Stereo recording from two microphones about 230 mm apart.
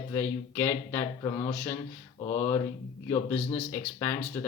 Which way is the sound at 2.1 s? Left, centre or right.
Centre.